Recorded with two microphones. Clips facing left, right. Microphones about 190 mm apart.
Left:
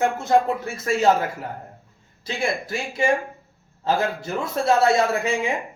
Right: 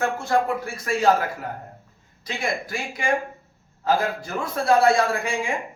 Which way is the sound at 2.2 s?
25° left (ahead or behind).